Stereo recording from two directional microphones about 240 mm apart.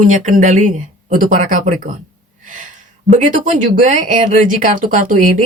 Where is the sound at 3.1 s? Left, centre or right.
Right.